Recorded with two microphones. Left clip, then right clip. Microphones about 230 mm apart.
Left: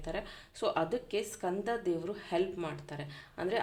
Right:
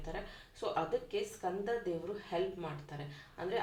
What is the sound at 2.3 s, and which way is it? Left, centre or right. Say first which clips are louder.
Speech: left 4 dB; left.